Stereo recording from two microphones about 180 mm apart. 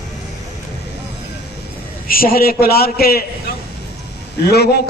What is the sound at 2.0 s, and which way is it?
A man's voice, 55° left (ahead or behind).